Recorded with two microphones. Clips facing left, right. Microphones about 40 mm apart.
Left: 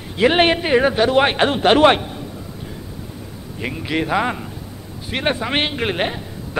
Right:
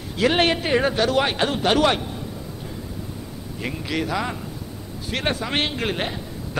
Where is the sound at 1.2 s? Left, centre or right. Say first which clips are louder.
Left 6 dB; left.